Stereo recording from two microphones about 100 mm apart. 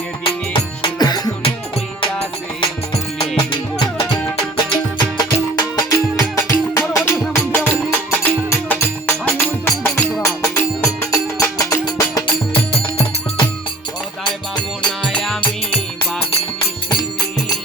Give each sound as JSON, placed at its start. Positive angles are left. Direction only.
{"t": 0.9, "sound": "music", "side_deg": 40}
{"t": 2.6, "sound": "music", "side_deg": 75}
{"t": 3.5, "sound": "music", "side_deg": 55}
{"t": 12.5, "sound": "music", "side_deg": 65}
{"t": 14.8, "sound": "music", "side_deg": 10}